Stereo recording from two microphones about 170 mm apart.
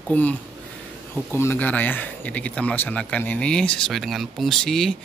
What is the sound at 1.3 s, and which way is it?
A man's voice, 10° left (ahead or behind).